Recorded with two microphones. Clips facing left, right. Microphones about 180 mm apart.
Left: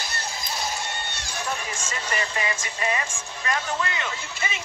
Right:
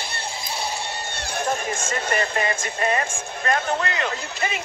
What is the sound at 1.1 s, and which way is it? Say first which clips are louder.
Speech: right 10 dB; 50° right (ahead or behind).